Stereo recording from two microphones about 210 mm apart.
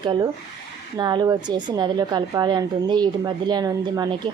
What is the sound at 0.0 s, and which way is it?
A woman's voice, 20° right (ahead or behind).